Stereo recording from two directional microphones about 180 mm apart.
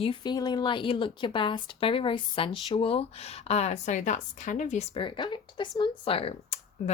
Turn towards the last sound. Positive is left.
turn(degrees=35)  # may be behind; listen again after turning